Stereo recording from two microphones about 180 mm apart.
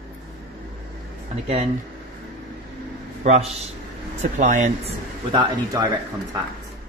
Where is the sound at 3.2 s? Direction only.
35° right (ahead or behind).